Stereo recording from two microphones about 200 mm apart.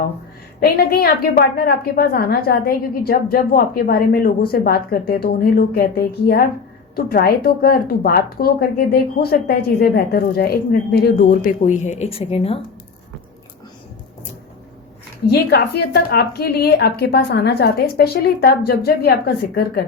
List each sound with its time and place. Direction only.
0.6 s a woman's voice: 50° left (ahead or behind); by 12.6 s 30° left (ahead or behind)
15.3 s a woman's voice: 55° left (ahead or behind)